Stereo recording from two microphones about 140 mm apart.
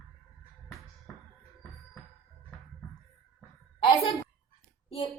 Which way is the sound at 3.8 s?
35° left (ahead or behind).